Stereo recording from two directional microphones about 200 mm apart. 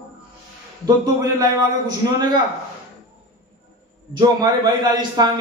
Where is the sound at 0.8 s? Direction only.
20° right (ahead or behind).